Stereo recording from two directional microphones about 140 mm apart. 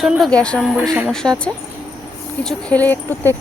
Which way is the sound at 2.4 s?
5° left (ahead or behind).